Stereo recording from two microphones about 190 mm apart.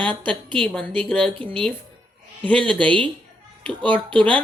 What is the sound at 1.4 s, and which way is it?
Speech, 25° right (ahead or behind).